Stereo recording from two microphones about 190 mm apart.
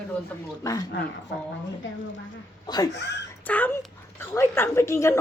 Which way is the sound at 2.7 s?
20° left (ahead or behind).